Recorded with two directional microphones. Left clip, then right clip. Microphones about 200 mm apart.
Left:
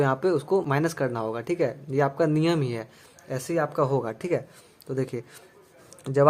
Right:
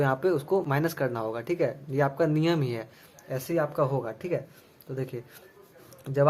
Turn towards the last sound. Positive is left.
turn(degrees=30)  # may be behind; listen again after turning